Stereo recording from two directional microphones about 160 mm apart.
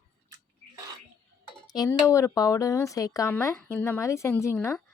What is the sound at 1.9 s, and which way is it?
Speech, 20° left (ahead or behind).